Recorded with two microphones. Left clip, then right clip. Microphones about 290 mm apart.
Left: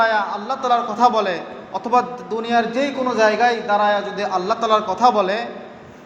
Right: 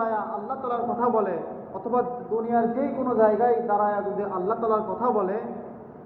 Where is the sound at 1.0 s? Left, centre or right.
Left.